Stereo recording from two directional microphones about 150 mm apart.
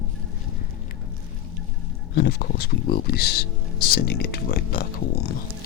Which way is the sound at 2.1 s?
90° left.